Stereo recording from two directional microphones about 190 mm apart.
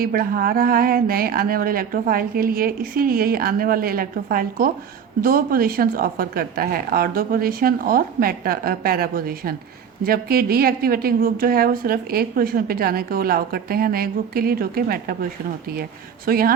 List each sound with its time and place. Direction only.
0.0 s a woman's voice: 50° right (ahead or behind)